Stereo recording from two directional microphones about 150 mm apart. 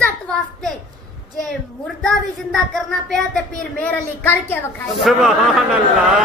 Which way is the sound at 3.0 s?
5° left (ahead or behind).